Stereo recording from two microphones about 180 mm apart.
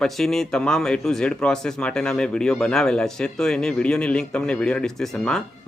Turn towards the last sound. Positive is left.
turn(degrees=5)  # may be behind; listen again after turning